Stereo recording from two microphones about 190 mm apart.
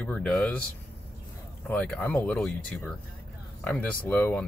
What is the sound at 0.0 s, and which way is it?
Speech, 5° left (ahead or behind).